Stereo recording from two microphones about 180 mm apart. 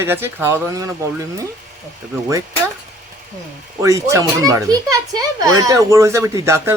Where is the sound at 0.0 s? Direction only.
15° right (ahead or behind).